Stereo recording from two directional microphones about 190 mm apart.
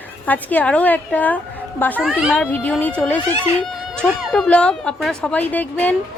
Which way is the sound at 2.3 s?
10° left (ahead or behind).